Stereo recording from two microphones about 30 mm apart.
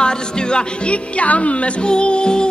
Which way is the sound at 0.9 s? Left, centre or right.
Left.